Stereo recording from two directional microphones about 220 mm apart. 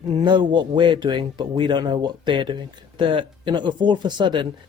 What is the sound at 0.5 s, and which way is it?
Speech, 20° right (ahead or behind).